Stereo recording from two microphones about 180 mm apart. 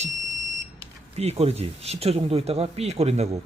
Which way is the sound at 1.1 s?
35° right (ahead or behind).